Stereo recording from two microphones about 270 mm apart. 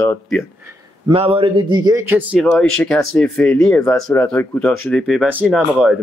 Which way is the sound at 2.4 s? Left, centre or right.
Centre.